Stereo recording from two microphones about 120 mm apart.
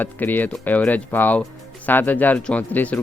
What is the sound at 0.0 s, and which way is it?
Speech, 15° left (ahead or behind).